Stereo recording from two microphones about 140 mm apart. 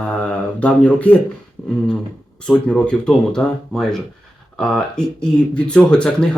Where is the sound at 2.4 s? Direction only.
5° left (ahead or behind).